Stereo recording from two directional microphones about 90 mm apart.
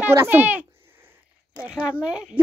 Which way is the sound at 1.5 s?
15° right (ahead or behind).